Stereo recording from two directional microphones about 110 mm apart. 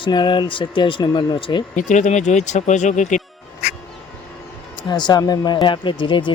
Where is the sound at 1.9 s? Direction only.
90° left.